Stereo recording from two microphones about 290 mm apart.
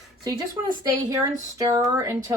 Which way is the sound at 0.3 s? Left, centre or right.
Centre.